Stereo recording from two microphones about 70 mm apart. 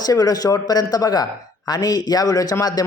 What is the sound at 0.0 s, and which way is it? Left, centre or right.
Speech, left.